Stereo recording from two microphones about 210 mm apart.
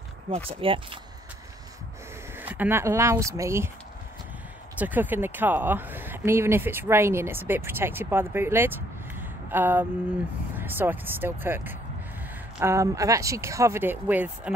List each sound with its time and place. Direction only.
0.3 s speech: 25° right (ahead or behind)
2.3 s speech: 10° right (ahead or behind)
4.7 s speech: 10° right (ahead or behind)